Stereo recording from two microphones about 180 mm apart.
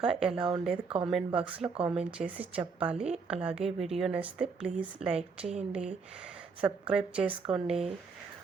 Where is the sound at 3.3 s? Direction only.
5° right (ahead or behind).